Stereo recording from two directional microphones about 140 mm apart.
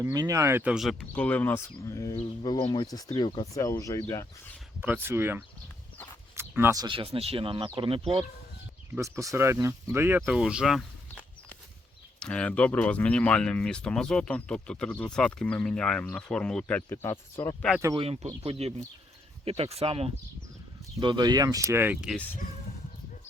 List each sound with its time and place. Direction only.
0.0 s speech: 25° right (ahead or behind); by 2.1 s 20° left (ahead or behind)
2.4 s speech: 35° left (ahead or behind)
3.5 s speech: 20° left (ahead or behind)
4.8 s speech: 15° right (ahead or behind)
6.3 s a sound: 15° right (ahead or behind)
6.7 s speech: 35° right (ahead or behind)
9.0 s speech: 20° right (ahead or behind); by 10.8 s 5° right (ahead or behind)
12.2 s speech: 5° left (ahead or behind)
17.6 s speech: 5° left (ahead or behind)
17.9 s speech: 45° right (ahead or behind)
21.0 s speech: 35° right (ahead or behind); by 21.9 s 15° right (ahead or behind)
22.1 s speech: 10° left (ahead or behind)